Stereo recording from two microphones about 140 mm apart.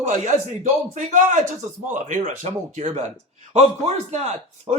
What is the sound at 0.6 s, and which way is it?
A man's voice, 60° right (ahead or behind).